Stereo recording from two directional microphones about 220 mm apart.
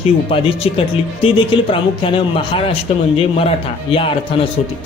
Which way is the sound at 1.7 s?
25° left (ahead or behind).